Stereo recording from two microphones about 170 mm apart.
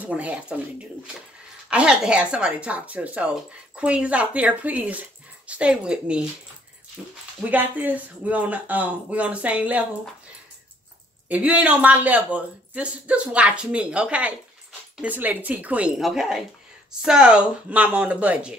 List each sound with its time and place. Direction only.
0.0 s speech: 10° right (ahead or behind)
7.4 s speech: 10° right (ahead or behind)
11.2 s speech: 10° right (ahead or behind)